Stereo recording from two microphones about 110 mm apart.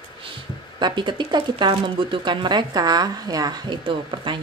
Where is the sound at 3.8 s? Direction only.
50° right (ahead or behind).